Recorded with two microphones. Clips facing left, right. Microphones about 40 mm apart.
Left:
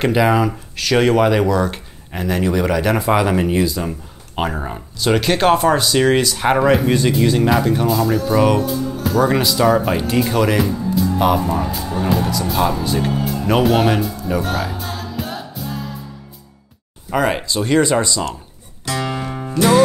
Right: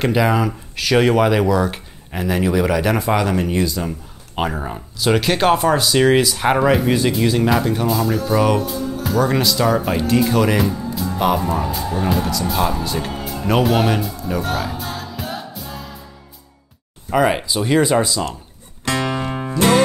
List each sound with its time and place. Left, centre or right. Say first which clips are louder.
0.0 s speech: left 2 dB; centre
17.1 s speech: right 1 dB; centre
19.2 s music: left 3 dB; right